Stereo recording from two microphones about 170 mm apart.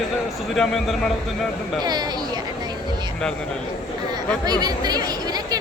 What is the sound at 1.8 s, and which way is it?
Speech, 25° right (ahead or behind).